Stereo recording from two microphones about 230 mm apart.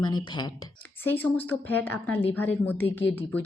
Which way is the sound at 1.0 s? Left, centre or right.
Centre.